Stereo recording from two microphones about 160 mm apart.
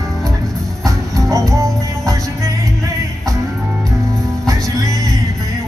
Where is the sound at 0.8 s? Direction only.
20° right (ahead or behind).